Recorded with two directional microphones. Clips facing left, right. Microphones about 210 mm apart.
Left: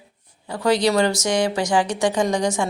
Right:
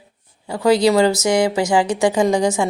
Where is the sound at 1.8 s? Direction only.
10° right (ahead or behind).